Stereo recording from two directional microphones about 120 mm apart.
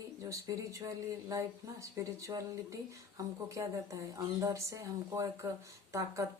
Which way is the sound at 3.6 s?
30° right (ahead or behind).